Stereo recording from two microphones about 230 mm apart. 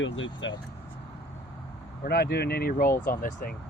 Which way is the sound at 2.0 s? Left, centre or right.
Left.